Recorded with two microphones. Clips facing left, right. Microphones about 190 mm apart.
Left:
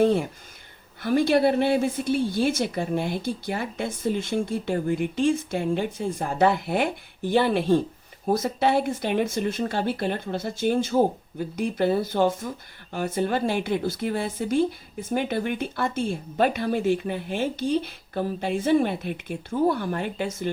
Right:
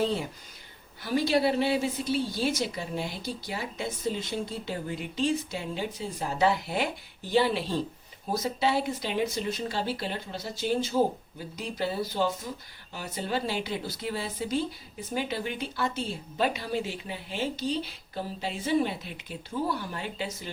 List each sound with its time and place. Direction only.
0.0 s a woman's voice: 55° left (ahead or behind)